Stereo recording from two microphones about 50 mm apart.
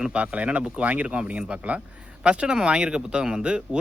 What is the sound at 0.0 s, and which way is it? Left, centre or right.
Speech, right.